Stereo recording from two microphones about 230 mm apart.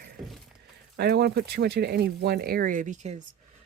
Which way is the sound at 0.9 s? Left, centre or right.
Right.